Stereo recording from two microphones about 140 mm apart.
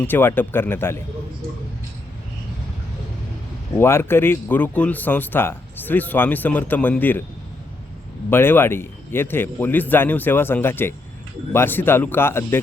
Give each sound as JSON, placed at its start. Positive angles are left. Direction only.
{"t": 0.1, "sound": "speech", "side_deg": 15}
{"t": 3.8, "sound": "speech", "side_deg": 15}
{"t": 8.3, "sound": "speech", "side_deg": 15}